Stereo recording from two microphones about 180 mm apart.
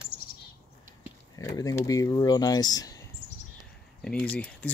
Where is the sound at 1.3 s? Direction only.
20° left (ahead or behind).